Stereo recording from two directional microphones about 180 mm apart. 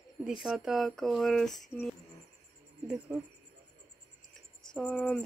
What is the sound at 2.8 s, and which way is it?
Speech, 10° right (ahead or behind).